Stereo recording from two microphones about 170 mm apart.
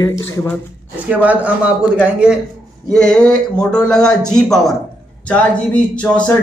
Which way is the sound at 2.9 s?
5° left (ahead or behind).